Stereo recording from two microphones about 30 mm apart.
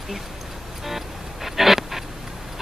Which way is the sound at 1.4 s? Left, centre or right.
Centre.